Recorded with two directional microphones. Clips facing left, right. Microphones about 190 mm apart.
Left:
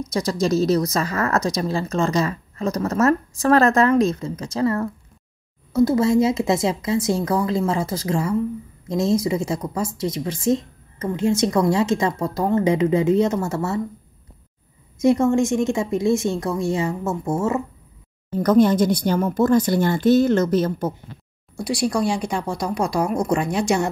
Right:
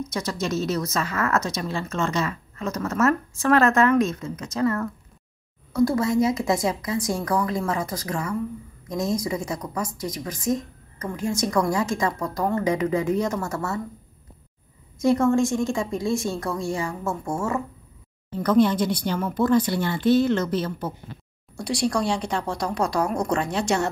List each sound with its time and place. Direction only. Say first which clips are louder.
0.1 s a woman's voice: left 8 dB; 35° left (ahead or behind)
15.0 s speech: left 2 dB; 20° left (ahead or behind)
18.4 s speech: left 4 dB; 45° left (ahead or behind)
21.5 s speech: left 2 dB; 10° left (ahead or behind)